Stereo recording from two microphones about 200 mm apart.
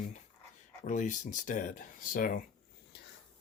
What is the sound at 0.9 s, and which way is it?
Speech, 40° left (ahead or behind).